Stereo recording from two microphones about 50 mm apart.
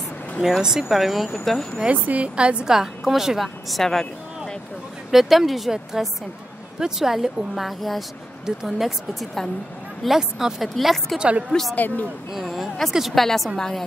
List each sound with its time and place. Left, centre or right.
0.4 s speech: centre
1.9 s a woman's voice: right; by 4.6 s centre
5.1 s a woman's voice: centre
11.1 s a woman's voice: right
11.7 s speech: left
12.3 s a woman's voice: centre